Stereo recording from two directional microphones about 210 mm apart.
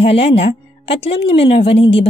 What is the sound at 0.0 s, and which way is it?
Speech, 30° left (ahead or behind).